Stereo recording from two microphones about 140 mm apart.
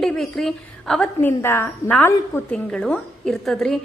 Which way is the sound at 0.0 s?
Centre (ahead or behind).